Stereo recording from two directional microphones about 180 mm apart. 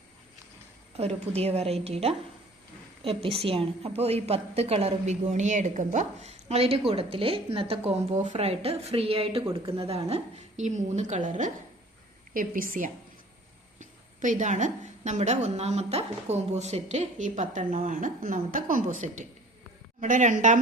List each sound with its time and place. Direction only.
1.3 s a woman's voice: 35° right (ahead or behind)